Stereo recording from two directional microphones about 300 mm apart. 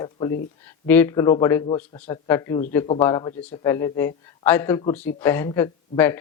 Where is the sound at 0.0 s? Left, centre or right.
Centre.